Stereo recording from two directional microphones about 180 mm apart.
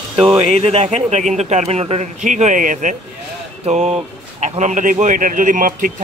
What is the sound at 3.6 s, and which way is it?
Speech, 35° right (ahead or behind).